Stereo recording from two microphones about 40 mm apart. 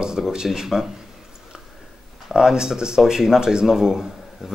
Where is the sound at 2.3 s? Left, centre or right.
Centre.